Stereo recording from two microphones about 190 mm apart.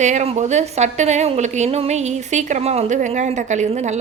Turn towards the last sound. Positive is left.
turn(degrees=-35)  # may be behind; listen again after turning